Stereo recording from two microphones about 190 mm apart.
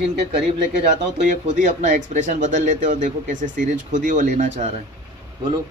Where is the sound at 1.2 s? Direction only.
40° right (ahead or behind).